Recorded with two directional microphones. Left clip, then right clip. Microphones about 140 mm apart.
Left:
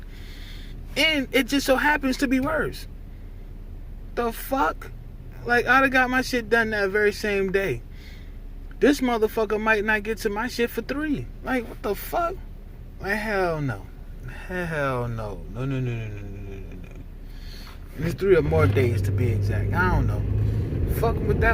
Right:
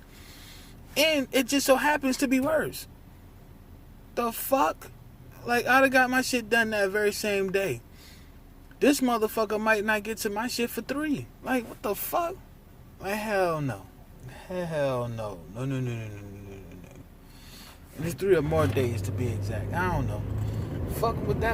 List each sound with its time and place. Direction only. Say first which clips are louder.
0.4 s speech: left 4 dB; 45° right (ahead or behind)
4.1 s speech: even; 45° right (ahead or behind)
8.8 s speech: left 3 dB; 45° right (ahead or behind)
17.7 s a sound: left 4 dB; 40° right (ahead or behind)
18.7 s speech: left 5 dB; 25° right (ahead or behind)